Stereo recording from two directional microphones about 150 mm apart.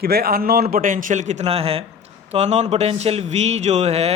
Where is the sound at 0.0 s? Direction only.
90° right.